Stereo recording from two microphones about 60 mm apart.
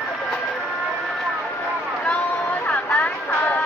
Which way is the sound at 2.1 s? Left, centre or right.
Left.